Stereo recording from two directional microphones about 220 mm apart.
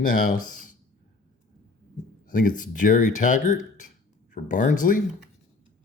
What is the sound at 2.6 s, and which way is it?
Speech, 35° left (ahead or behind).